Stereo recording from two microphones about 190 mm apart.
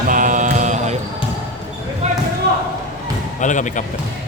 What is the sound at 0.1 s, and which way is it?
Mantra, 45° right (ahead or behind).